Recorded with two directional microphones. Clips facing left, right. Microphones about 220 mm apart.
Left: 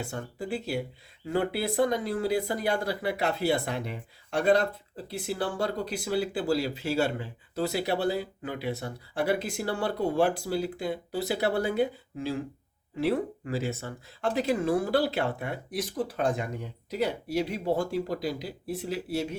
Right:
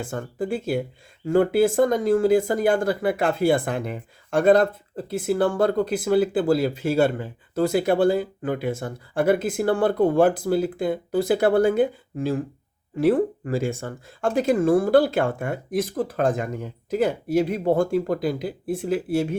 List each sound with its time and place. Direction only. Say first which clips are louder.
0.0 s speech: right 7 dB; 50° right (ahead or behind)